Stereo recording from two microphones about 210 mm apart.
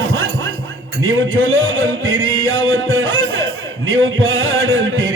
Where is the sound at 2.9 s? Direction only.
65° right (ahead or behind).